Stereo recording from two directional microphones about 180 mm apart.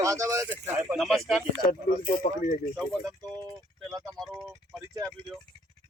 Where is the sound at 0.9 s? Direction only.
Centre (ahead or behind).